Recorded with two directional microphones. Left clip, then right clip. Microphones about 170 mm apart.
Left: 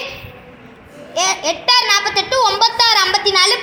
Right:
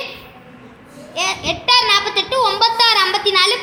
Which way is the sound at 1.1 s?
25° left (ahead or behind).